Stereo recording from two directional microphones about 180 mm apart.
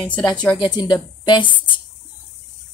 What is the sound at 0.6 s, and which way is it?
A woman's voice, 25° left (ahead or behind).